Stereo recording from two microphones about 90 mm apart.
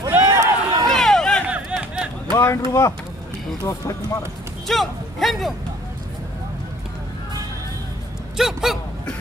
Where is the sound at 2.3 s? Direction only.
35° left (ahead or behind).